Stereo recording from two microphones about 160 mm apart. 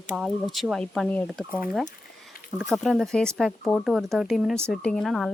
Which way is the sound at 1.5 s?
10° right (ahead or behind).